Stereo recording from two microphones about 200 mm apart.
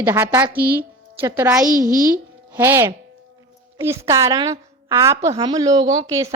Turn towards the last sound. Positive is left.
turn(degrees=-15)  # may be behind; listen again after turning